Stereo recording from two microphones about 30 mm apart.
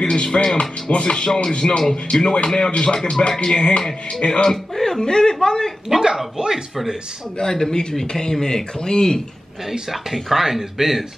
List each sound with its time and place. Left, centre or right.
0.0 s speech: left
4.5 s speech: centre
5.0 s speech: left
6.3 s speech: centre
8.1 s speech: left
9.7 s speech: centre